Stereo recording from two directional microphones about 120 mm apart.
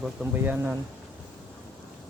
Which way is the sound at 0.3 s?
15° right (ahead or behind).